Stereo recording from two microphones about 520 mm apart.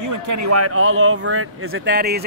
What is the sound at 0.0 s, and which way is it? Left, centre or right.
A man's voice, right.